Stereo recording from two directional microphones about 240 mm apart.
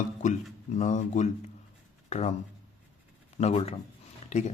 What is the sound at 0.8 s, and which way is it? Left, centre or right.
Speech, left.